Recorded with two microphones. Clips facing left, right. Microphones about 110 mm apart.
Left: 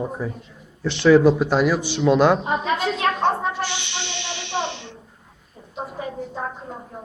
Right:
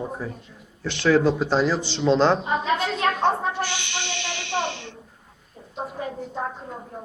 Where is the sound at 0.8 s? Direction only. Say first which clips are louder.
Left 5 dB; 20° left (ahead or behind).